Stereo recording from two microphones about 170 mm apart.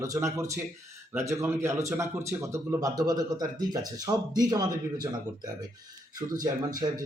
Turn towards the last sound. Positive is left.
turn(degrees=-25)  # may be behind; listen again after turning